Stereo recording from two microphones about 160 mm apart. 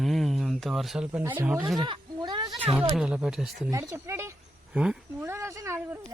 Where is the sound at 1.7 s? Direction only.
25° right (ahead or behind).